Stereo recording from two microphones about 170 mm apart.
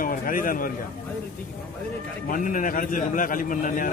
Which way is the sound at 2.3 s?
50° left (ahead or behind).